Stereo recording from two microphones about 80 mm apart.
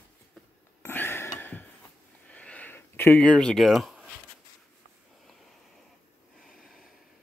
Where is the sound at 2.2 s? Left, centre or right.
Centre.